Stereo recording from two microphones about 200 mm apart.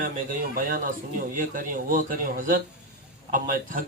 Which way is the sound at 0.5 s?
45° right (ahead or behind).